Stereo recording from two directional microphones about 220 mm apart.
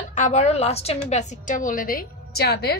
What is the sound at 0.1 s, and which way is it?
A woman's voice, 35° left (ahead or behind).